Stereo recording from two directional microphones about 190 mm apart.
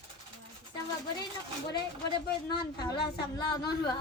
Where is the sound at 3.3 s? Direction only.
20° left (ahead or behind).